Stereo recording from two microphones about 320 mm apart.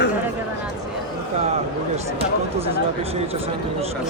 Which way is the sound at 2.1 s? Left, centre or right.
Centre.